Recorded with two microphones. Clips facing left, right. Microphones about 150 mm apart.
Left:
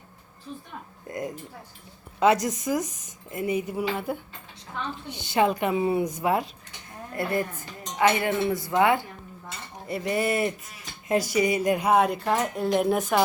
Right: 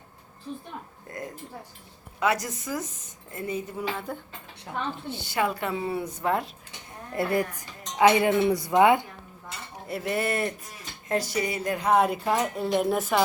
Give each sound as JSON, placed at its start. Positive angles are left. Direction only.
{"t": 1.0, "sound": "a sound", "side_deg": 20}
{"t": 2.1, "sound": "speech", "side_deg": 20}
{"t": 7.1, "sound": "a woman's voice", "side_deg": -20}
{"t": 7.9, "sound": "cowbell", "side_deg": -15}
{"t": 8.7, "sound": "a woman's voice", "side_deg": -20}
{"t": 9.8, "sound": "a woman's voice", "side_deg": 0}
{"t": 11.1, "sound": "speech", "side_deg": 15}
{"t": 11.9, "sound": "a woman's voice", "side_deg": -5}